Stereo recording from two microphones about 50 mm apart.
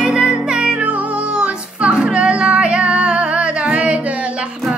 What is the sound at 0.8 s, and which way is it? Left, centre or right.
Music, right.